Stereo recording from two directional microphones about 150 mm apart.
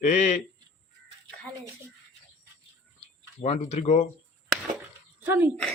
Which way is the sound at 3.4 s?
45° left (ahead or behind).